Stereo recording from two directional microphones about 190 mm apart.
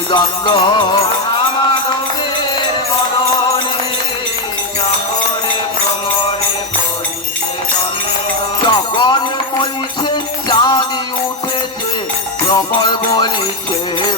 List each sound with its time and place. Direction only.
0.1 s music: 25° left (ahead or behind)
8.6 s music: 25° left (ahead or behind)
12.5 s music: 25° left (ahead or behind)